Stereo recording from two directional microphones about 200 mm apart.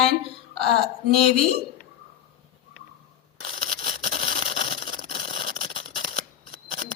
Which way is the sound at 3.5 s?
45° right (ahead or behind).